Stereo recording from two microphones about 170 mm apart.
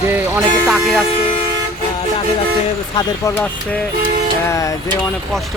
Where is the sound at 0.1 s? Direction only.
15° right (ahead or behind).